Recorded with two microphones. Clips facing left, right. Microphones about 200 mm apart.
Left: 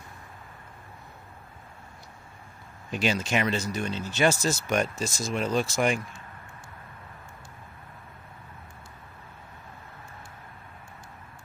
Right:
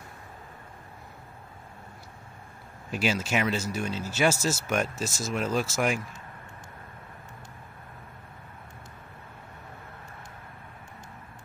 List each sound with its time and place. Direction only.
2.9 s speech: 5° right (ahead or behind)